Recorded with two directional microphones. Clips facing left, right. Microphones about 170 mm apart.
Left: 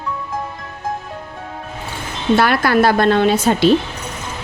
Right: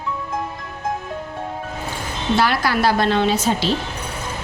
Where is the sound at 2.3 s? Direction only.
55° left (ahead or behind).